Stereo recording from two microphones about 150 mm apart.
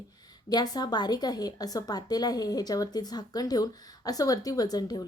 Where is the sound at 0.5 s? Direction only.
25° left (ahead or behind).